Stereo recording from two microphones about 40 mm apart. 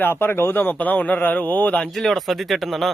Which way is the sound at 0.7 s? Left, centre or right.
Left.